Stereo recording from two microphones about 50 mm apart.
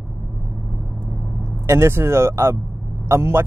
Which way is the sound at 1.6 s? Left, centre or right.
Right.